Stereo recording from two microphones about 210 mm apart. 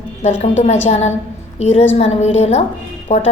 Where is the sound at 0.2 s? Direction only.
30° left (ahead or behind).